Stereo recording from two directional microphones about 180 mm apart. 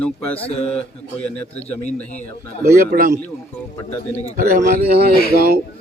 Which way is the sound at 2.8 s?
55° right (ahead or behind).